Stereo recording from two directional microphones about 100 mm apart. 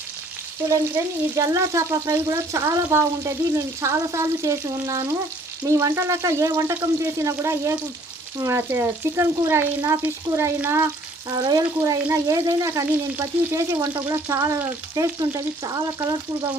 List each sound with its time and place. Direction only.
0.7 s frying: 30° right (ahead or behind)
2.1 s speech: 25° right (ahead or behind)
11.3 s frying: 45° right (ahead or behind)
12.0 s frying: 30° right (ahead or behind)
12.9 s speech: 25° right (ahead or behind)
14.9 s frying: 35° right (ahead or behind)